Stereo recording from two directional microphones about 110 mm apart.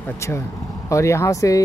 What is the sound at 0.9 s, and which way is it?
Speech, 25° left (ahead or behind).